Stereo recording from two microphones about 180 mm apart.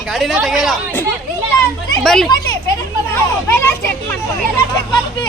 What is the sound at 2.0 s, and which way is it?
Speech, 5° left (ahead or behind).